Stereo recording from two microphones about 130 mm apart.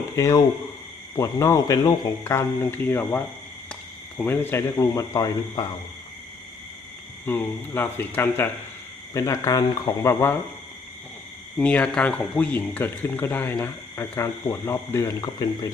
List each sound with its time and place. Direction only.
0.2 s speech: 25° left (ahead or behind)
7.3 s speech: 15° left (ahead or behind)
11.5 s speech: 10° left (ahead or behind); by 15.7 s 30° left (ahead or behind)